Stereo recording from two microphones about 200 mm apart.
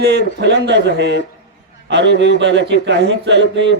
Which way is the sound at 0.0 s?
55° right (ahead or behind).